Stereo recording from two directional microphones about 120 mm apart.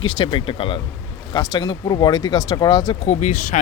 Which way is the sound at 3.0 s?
70° left (ahead or behind).